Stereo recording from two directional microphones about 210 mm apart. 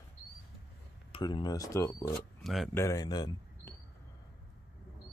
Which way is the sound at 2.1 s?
Centre (ahead or behind).